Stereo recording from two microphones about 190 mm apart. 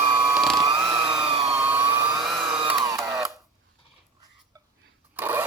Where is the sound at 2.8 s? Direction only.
15° right (ahead or behind).